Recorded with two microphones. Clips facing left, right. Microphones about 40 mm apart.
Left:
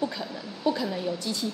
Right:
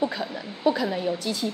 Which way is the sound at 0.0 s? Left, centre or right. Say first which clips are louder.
Right 4 dB; right.